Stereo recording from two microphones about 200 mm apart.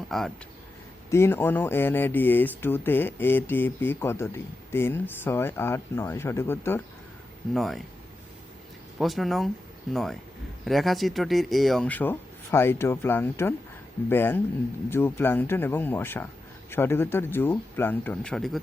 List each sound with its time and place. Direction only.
0.1 s speech: centre (ahead or behind)
1.1 s speech: 10° left (ahead or behind)
7.5 s speech: centre (ahead or behind)
9.0 s speech: centre (ahead or behind)